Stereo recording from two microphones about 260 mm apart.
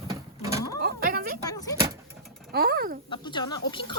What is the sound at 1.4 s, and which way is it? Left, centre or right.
Vehicle, centre.